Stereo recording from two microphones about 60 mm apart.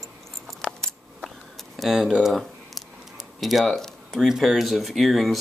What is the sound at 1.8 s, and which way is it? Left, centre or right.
Speech, centre.